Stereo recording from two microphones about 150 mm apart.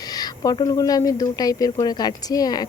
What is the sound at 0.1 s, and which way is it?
A woman's voice, 25° left (ahead or behind).